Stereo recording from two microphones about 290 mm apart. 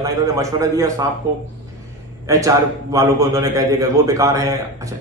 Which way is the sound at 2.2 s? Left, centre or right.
Centre.